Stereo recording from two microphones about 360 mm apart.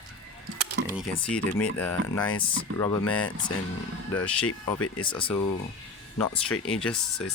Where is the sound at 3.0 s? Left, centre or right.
Left.